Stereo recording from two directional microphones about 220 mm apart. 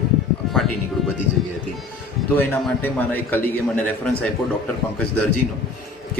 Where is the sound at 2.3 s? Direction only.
10° left (ahead or behind).